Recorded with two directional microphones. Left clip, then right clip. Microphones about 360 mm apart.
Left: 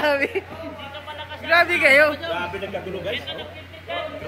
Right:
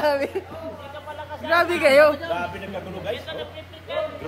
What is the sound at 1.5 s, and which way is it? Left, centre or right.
Speech, centre.